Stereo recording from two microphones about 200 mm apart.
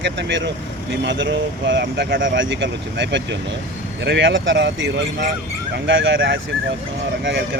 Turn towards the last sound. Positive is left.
turn(degrees=-65)  # may be behind; listen again after turning